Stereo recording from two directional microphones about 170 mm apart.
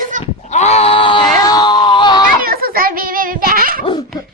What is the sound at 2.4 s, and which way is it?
Children playing, 60° right (ahead or behind).